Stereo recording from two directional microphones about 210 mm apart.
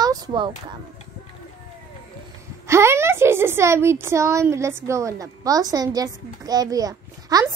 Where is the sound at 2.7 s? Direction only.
10° right (ahead or behind).